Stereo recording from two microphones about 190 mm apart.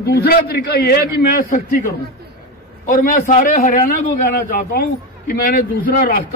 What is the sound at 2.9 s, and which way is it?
A man's voice, 45° left (ahead or behind).